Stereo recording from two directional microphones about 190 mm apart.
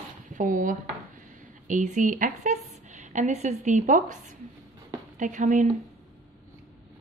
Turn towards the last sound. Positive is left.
turn(degrees=-40)  # may be behind; listen again after turning